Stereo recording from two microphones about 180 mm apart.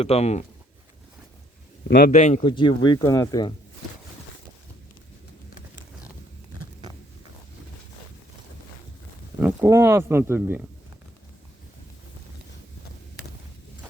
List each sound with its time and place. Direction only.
0.0 s speech: 35° left (ahead or behind)
1.9 s a man's voice: 45° left (ahead or behind)
2.4 s speech: 25° left (ahead or behind)
9.4 s speech: 10° right (ahead or behind)